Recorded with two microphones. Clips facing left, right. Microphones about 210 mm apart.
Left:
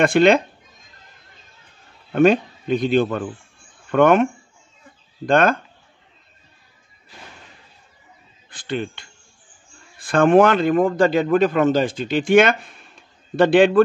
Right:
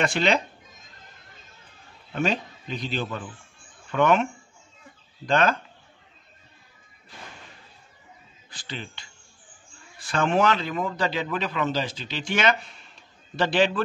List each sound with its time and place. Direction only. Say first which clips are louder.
0.0 s a man's voice: left 9 dB; 55° left (ahead or behind)
2.1 s a man's voice: left 11 dB; 55° left (ahead or behind)
8.5 s a man's voice: left 12 dB; 55° left (ahead or behind)